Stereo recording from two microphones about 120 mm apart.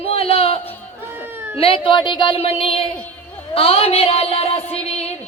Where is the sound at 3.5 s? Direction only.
55° left (ahead or behind).